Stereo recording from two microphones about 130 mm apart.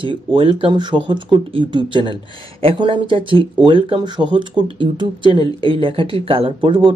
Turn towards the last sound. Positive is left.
turn(degrees=-45)  # may be behind; listen again after turning